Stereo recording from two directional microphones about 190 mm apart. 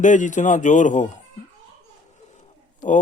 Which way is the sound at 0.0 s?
40° left (ahead or behind).